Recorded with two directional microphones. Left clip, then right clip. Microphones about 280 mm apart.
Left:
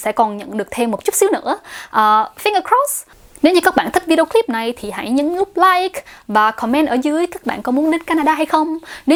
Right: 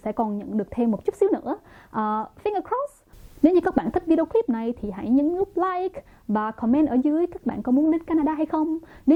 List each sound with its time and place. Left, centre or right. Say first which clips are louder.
0.0 s speech: left 11 dB; centre